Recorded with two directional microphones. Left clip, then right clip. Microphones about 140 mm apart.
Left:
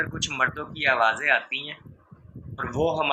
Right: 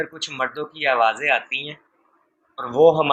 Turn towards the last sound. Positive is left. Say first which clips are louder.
# right 9 dB
turn(degrees=-25)  # may be behind; listen again after turning